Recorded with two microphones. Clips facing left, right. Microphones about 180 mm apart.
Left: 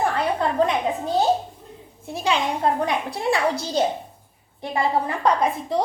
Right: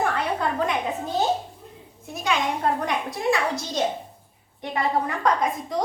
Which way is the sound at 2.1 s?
30° left (ahead or behind).